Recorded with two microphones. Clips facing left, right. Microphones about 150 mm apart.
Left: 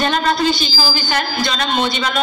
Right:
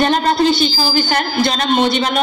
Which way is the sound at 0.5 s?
50° right (ahead or behind).